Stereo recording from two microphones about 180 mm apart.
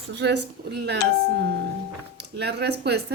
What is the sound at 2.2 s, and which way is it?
Speech, 70° right (ahead or behind).